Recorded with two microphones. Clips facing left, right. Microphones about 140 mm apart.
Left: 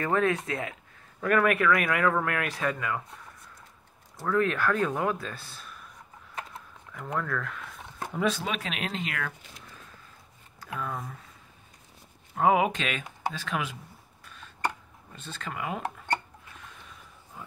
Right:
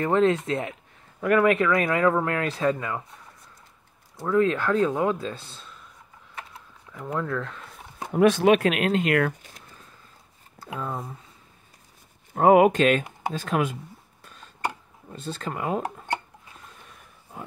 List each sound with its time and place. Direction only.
0.0 s speech: 25° right (ahead or behind)
4.2 s speech: 20° right (ahead or behind)
6.9 s speech: 25° right (ahead or behind)
8.1 s speech: 60° right (ahead or behind)
10.8 s speech: 30° right (ahead or behind)
12.4 s speech: 50° right (ahead or behind)
15.1 s speech: 40° right (ahead or behind)